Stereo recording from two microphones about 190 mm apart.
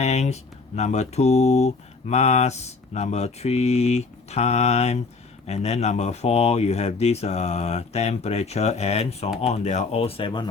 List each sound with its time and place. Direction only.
0.0 s mantra: 35° left (ahead or behind)